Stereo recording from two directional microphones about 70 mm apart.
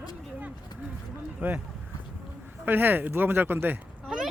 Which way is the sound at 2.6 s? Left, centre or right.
Right.